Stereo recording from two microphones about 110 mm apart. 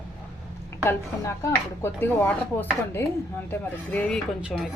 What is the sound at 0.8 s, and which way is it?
Speech, 25° left (ahead or behind).